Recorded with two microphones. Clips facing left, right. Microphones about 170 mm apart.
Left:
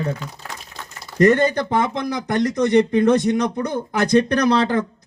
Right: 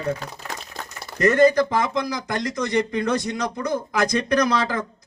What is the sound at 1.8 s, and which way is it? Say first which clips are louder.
Speech: left 2 dB; 60° left (ahead or behind).